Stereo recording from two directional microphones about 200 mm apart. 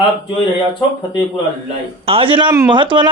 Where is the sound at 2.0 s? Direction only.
25° right (ahead or behind).